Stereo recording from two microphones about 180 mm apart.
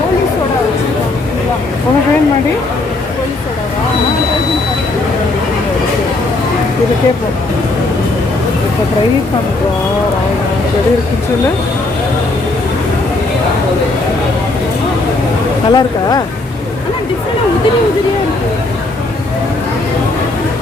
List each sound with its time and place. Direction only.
15.7 s speech: 20° left (ahead or behind)